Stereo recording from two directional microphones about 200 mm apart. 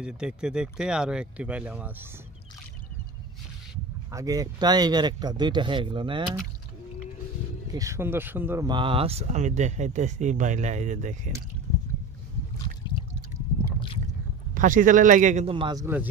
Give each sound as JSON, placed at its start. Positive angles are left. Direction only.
{"t": 0.0, "sound": "speech", "side_deg": -5}
{"t": 4.1, "sound": "speech", "side_deg": -15}
{"t": 7.7, "sound": "speech", "side_deg": -15}
{"t": 8.6, "sound": "speech", "side_deg": -25}
{"t": 14.5, "sound": "speech", "side_deg": -40}
{"t": 15.5, "sound": "speech", "side_deg": -20}